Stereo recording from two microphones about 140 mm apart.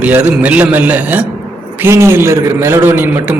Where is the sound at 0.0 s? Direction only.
10° right (ahead or behind).